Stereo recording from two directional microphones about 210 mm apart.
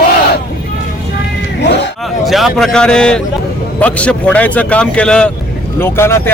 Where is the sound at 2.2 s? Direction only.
Centre (ahead or behind).